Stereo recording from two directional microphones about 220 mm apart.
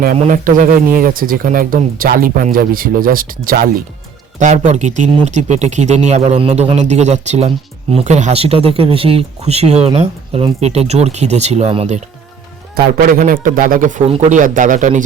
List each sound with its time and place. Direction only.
0.0 s speech: 35° right (ahead or behind)